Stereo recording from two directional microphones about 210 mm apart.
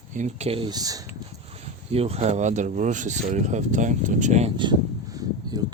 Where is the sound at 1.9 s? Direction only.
30° right (ahead or behind).